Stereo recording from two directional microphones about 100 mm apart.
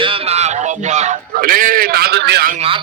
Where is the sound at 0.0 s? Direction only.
65° right (ahead or behind).